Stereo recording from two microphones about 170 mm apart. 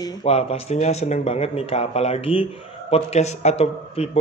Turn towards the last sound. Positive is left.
turn(degrees=40)  # may be behind; listen again after turning